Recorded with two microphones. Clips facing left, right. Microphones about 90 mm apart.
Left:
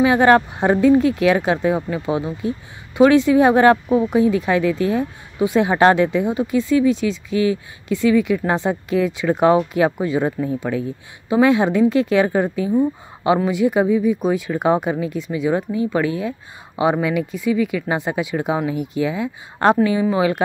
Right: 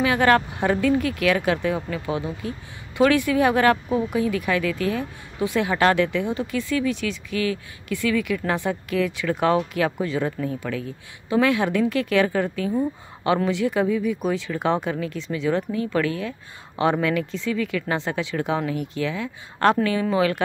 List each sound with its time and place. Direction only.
0.0 s speech: 20° left (ahead or behind)